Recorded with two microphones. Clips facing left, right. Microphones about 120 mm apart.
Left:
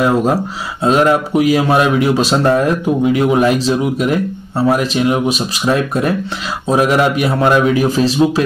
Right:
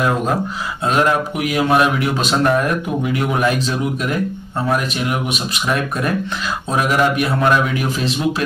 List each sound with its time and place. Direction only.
0.8 s speech: 25° left (ahead or behind)